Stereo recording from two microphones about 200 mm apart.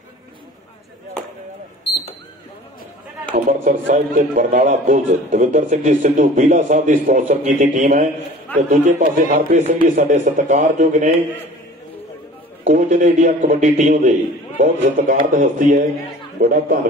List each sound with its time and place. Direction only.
3.3 s a man's voice: 40° right (ahead or behind)
12.6 s a man's voice: 35° right (ahead or behind)